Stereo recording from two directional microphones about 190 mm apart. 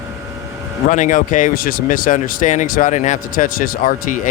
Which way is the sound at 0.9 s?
40° left (ahead or behind).